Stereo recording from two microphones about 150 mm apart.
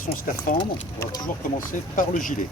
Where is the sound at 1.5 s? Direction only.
60° left (ahead or behind).